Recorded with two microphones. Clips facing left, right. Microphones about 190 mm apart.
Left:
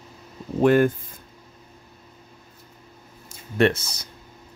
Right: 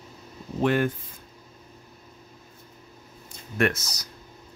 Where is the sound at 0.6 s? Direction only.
45° left (ahead or behind).